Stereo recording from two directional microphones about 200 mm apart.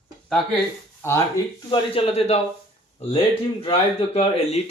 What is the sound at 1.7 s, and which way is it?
Speech, 30° left (ahead or behind).